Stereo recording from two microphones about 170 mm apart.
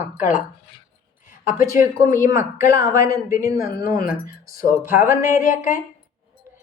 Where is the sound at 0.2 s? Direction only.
50° left (ahead or behind).